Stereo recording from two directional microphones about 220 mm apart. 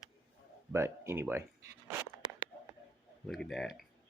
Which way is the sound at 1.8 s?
10° right (ahead or behind).